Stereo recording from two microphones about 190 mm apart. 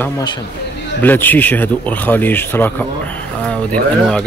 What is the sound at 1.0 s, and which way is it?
A man's voice, 10° left (ahead or behind).